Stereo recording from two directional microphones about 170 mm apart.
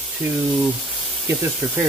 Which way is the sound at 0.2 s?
15° right (ahead or behind).